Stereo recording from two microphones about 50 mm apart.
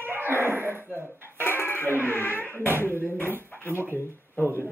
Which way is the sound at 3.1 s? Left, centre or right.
Left.